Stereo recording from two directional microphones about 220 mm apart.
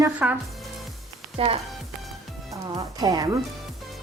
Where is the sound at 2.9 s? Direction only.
15° right (ahead or behind).